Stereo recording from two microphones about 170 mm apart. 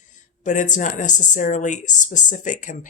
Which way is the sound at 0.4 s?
45° left (ahead or behind).